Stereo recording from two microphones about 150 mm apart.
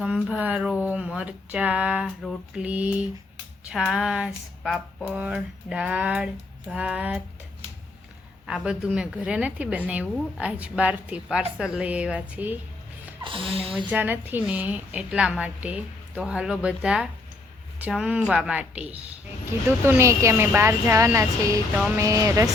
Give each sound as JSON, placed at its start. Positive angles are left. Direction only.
{"t": 0.0, "sound": "a woman's voice", "side_deg": -10}
{"t": 3.7, "sound": "a sound", "side_deg": -5}
{"t": 5.0, "sound": "a woman's voice", "side_deg": -5}
{"t": 8.4, "sound": "a woman's voice", "side_deg": -5}
{"t": 13.2, "sound": "speech", "side_deg": -35}
{"t": 13.6, "sound": "a woman's voice", "side_deg": -5}